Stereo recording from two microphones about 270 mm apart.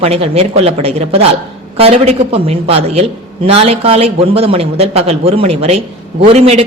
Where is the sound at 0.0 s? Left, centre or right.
Right.